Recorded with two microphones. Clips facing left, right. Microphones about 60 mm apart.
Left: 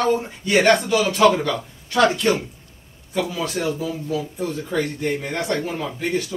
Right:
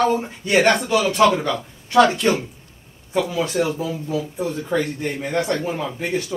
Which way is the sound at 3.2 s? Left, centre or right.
Right.